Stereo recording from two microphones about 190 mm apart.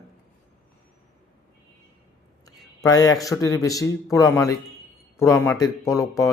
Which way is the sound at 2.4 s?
20° left (ahead or behind).